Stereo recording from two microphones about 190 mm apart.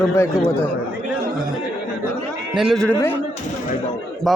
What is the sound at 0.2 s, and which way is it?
Speech, 10° left (ahead or behind).